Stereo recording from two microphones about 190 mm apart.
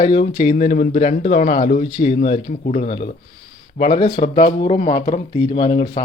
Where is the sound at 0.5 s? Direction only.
40° left (ahead or behind).